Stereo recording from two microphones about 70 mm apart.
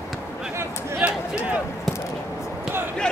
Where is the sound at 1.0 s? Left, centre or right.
Centre.